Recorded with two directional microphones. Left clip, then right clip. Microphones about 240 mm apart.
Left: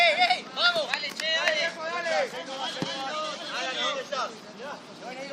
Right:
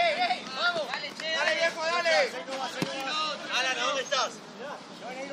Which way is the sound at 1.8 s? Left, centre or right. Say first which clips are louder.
Right 4 dB; right.